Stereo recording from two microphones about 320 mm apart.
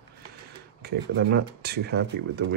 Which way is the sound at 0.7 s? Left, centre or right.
Right.